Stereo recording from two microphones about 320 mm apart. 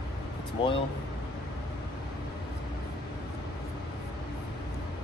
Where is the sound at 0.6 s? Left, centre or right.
Centre.